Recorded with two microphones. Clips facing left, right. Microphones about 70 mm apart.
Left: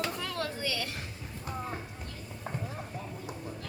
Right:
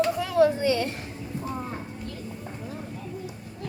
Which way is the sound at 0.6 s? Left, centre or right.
Right.